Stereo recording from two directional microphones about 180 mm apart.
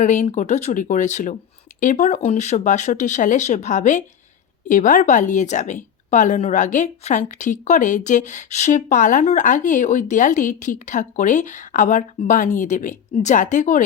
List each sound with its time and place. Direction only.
0.0 s speech: 40° left (ahead or behind)